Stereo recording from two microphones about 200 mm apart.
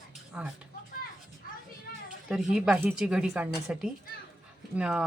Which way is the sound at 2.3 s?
5° right (ahead or behind).